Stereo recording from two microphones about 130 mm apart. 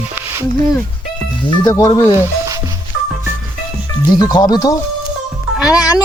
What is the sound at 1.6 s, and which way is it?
Speech, 30° left (ahead or behind).